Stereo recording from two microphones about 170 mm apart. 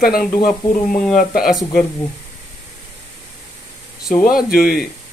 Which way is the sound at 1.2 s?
55° left (ahead or behind).